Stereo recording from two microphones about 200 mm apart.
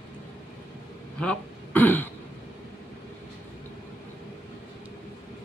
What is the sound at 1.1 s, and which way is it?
Throat clearing, 5° left (ahead or behind).